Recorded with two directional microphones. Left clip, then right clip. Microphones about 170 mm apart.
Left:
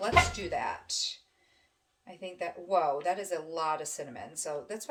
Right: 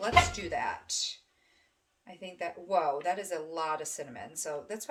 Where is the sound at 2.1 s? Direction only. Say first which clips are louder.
Left 1 dB; 20° right (ahead or behind).